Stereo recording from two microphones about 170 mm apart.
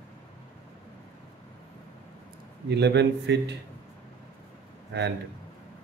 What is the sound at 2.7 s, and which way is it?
Speech, 85° right.